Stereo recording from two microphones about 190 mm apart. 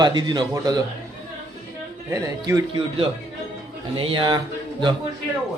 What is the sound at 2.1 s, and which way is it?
Speech, 15° right (ahead or behind).